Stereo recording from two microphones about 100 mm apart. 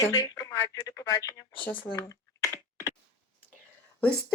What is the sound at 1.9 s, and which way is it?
Computer keyboard, 30° left (ahead or behind).